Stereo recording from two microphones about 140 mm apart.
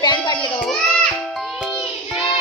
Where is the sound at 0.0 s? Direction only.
30° left (ahead or behind).